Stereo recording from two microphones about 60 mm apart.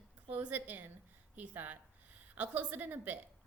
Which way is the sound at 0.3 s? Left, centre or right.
Right.